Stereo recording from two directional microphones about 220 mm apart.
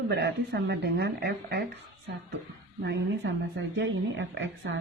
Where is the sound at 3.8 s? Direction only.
60° right (ahead or behind).